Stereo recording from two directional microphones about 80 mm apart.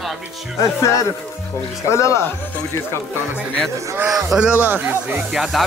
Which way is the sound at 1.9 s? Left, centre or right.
Left.